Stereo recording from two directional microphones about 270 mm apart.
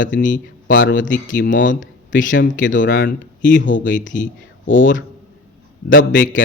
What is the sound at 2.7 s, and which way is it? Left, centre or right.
Speech, left.